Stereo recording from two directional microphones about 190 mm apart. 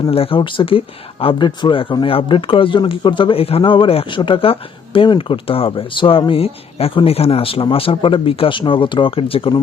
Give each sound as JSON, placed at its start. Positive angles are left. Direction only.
{"t": 0.0, "sound": "speech", "side_deg": 30}